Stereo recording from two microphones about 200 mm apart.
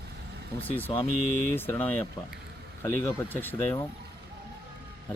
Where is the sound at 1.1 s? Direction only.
40° right (ahead or behind).